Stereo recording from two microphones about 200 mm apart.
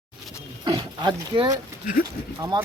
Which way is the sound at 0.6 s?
20° right (ahead or behind).